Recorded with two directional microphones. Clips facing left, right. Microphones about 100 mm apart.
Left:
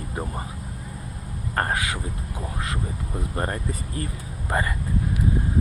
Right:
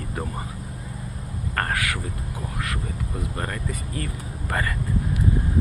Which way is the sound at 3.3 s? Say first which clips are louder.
Left 5 dB; 30° left (ahead or behind).